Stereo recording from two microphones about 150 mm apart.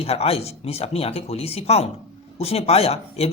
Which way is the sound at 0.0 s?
40° left (ahead or behind).